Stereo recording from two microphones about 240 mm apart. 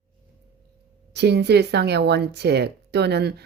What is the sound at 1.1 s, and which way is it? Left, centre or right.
Speech, right.